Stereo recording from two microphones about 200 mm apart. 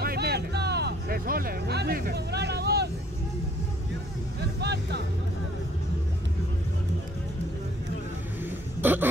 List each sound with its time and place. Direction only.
0.0 s music: 50° right (ahead or behind)
4.6 s music: 55° right (ahead or behind)
8.8 s a sound: 10° right (ahead or behind)